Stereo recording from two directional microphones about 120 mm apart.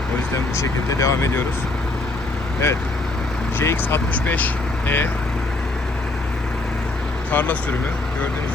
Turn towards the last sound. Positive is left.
turn(degrees=15)  # may be behind; listen again after turning